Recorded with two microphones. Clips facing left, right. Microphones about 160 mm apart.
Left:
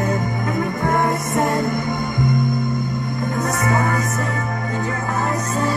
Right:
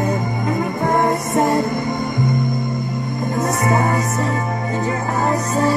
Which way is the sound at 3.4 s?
30° right (ahead or behind).